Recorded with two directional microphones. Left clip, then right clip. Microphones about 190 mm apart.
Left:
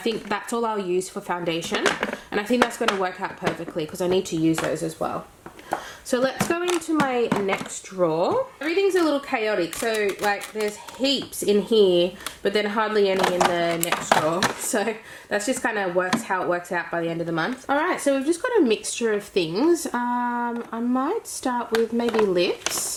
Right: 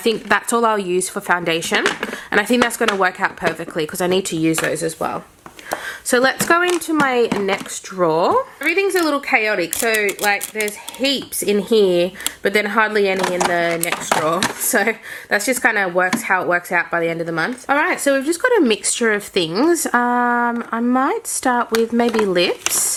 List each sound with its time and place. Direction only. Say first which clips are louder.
0.0 s speech: right 9 dB; 25° right (ahead or behind)
1.8 s speech: right 3 dB; centre (ahead or behind)
2.3 s speech: right 7 dB; 25° right (ahead or behind)
13.7 s speech: right 2 dB; centre (ahead or behind)
14.7 s speech: right 7 dB; 25° right (ahead or behind)